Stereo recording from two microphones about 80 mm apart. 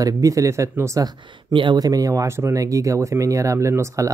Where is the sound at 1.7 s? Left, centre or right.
Right.